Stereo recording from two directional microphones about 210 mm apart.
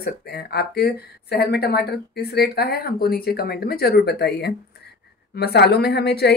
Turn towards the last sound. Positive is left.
turn(degrees=50)  # may be behind; listen again after turning